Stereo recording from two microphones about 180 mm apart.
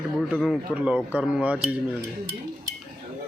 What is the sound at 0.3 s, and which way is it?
Speech, 5° left (ahead or behind).